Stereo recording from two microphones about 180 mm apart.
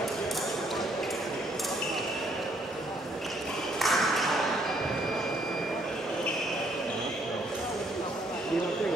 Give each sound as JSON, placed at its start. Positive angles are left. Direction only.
{"t": 3.8, "sound": "ping", "side_deg": 0}